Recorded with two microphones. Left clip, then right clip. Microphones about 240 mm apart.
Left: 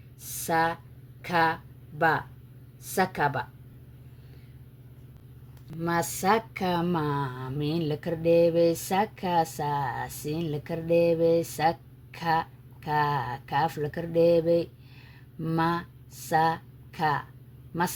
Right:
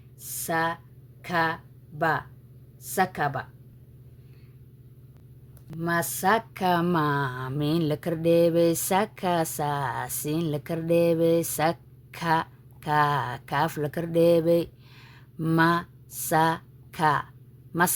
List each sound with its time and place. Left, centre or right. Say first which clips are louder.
0.4 s a woman's voice: left 1 dB; centre
5.7 s speech: right 1 dB; centre; by 17.2 s right